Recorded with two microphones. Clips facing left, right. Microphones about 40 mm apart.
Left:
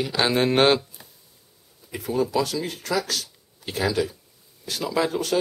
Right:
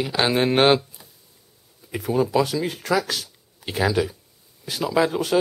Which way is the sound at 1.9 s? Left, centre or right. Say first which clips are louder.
Right 3 dB; centre.